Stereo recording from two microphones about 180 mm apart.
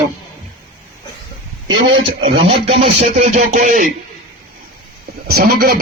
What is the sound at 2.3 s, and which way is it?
Speech, 35° right (ahead or behind).